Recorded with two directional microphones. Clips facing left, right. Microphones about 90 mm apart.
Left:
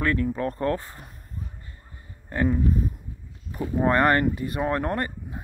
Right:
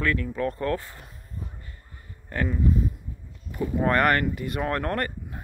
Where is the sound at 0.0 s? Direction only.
30° left (ahead or behind).